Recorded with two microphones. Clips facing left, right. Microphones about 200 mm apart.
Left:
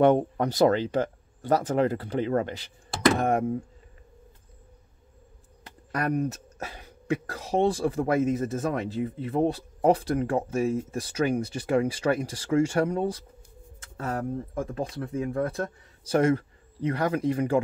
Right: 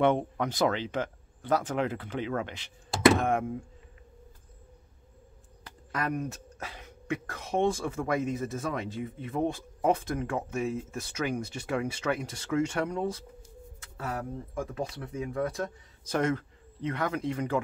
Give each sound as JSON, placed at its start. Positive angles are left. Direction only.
{"t": 0.0, "sound": "speech", "side_deg": 40}
{"t": 5.9, "sound": "a man's voice", "side_deg": 40}